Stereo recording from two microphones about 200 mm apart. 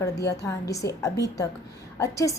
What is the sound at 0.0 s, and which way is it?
A woman's voice, 15° left (ahead or behind).